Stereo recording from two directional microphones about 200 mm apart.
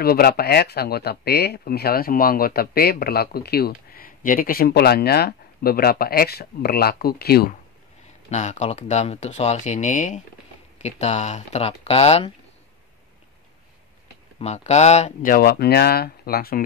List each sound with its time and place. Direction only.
0.0 s speech: 50° left (ahead or behind)
8.3 s speech: 35° left (ahead or behind)
14.4 s speech: 35° left (ahead or behind); by 16.6 s 50° left (ahead or behind)